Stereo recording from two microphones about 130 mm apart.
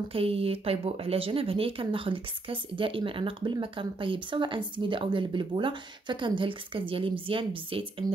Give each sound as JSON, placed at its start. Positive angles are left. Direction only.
{"t": 0.1, "sound": "speech", "side_deg": -45}
{"t": 8.0, "sound": "speech", "side_deg": -30}